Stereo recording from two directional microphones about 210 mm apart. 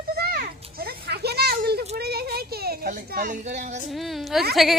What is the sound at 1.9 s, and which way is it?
Speech, 50° right (ahead or behind).